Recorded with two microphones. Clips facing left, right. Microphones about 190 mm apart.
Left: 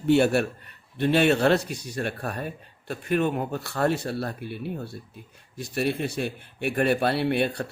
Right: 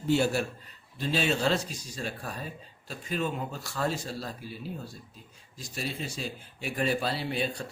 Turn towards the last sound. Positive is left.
turn(degrees=65)  # may be behind; listen again after turning